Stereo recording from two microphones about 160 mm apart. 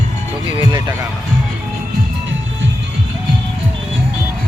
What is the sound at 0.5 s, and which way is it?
Speech, 25° right (ahead or behind).